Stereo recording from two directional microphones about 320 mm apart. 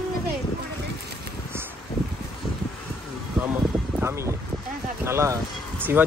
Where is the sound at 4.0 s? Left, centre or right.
Centre.